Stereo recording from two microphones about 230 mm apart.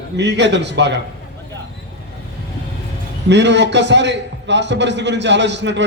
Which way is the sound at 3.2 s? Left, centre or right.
Right.